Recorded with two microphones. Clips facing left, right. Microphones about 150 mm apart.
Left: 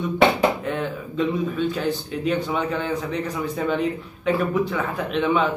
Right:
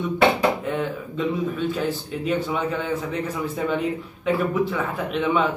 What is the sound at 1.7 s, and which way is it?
A man's voice, 5° right (ahead or behind).